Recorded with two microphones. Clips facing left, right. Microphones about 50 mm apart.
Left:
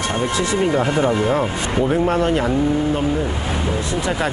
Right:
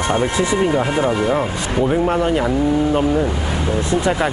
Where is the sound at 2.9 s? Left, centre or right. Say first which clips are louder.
Right 3 dB; right.